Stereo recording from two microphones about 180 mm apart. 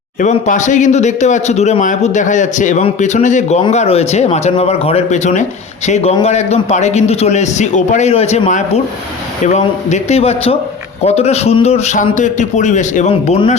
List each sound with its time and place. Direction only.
0.2 s speech: 45° left (ahead or behind)